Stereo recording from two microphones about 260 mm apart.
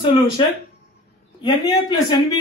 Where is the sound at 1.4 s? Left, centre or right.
Centre.